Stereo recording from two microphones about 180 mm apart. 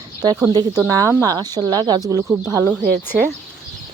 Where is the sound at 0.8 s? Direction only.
15° right (ahead or behind).